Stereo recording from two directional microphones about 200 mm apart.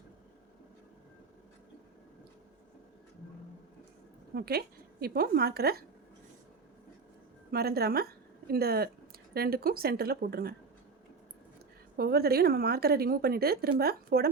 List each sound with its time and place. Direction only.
4.4 s a woman's voice: 50° right (ahead or behind)
7.5 s a woman's voice: 50° right (ahead or behind)
11.9 s a woman's voice: 50° right (ahead or behind)